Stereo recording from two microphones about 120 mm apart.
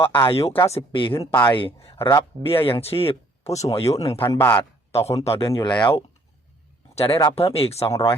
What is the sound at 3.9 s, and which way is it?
Speech, 55° left (ahead or behind).